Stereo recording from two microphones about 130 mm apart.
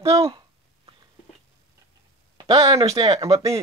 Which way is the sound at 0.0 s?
45° right (ahead or behind).